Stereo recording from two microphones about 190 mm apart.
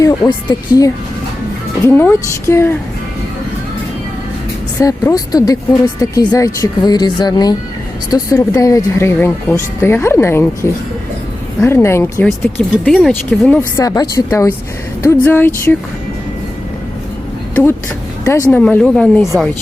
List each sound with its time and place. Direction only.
0.0 s speech: 20° left (ahead or behind)
4.8 s speech: 15° left (ahead or behind)
12.7 s speech: centre (ahead or behind)
13.7 s speech: 20° left (ahead or behind)
17.5 s speech: 10° left (ahead or behind)
18.6 s speech: 5° left (ahead or behind)